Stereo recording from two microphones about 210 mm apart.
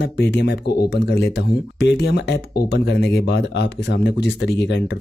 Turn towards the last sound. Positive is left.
turn(degrees=55)  # may be behind; listen again after turning